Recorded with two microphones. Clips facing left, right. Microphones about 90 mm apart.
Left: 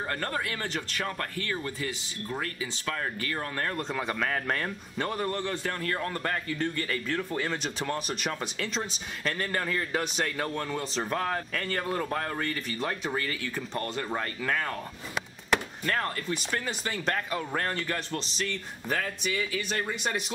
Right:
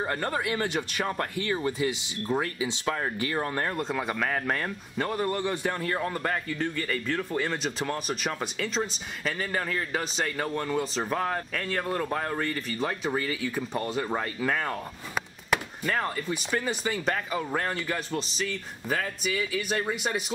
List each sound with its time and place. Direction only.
0.0 s speech: 15° right (ahead or behind)
3.7 s speech: 5° right (ahead or behind)
5.4 s speech: 15° right (ahead or behind)